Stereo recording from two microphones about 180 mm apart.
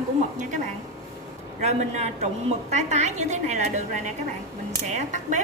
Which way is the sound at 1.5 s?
40° right (ahead or behind).